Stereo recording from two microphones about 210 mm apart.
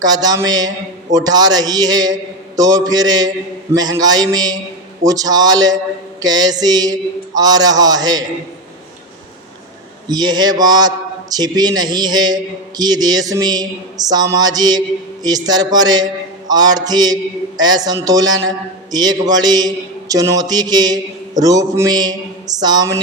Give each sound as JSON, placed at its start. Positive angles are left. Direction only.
{"t": 0.0, "sound": "a man's voice", "side_deg": -20}
{"t": 10.1, "sound": "a man's voice", "side_deg": -20}